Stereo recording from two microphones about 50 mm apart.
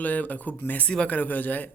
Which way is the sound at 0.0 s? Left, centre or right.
Left.